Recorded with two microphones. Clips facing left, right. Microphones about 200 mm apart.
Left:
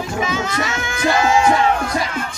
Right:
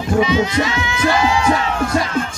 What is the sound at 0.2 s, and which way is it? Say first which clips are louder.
Music: right 5 dB; 45° left (ahead or behind).